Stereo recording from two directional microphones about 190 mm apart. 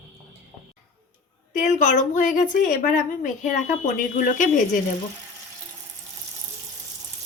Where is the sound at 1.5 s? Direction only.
40° left (ahead or behind).